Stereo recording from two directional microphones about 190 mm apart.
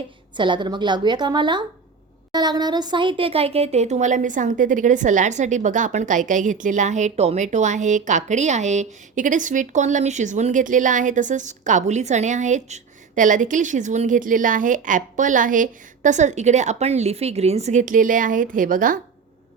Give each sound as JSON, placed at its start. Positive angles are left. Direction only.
{"t": 0.3, "sound": "a woman's voice", "side_deg": -25}